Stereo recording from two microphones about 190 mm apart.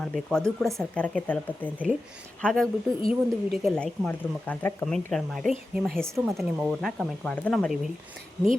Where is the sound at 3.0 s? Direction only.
30° left (ahead or behind).